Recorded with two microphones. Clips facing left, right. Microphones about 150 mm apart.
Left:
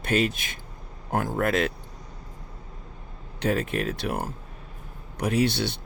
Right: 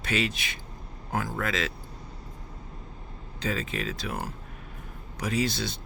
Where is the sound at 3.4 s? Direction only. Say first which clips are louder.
Left 6 dB; 60° left (ahead or behind).